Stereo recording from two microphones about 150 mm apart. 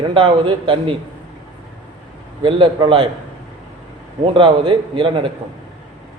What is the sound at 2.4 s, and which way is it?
Speech, 35° right (ahead or behind).